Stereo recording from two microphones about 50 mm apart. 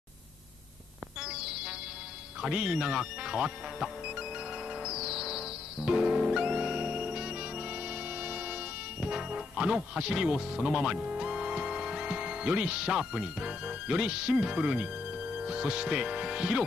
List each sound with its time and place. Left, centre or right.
1.2 s a sound: centre
2.5 s music: centre
15.3 s speech: centre